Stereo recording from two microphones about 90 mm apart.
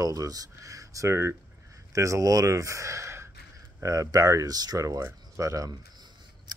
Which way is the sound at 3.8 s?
40° right (ahead or behind).